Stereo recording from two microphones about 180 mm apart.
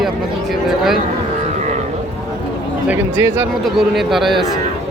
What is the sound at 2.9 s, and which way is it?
Speech, 10° right (ahead or behind).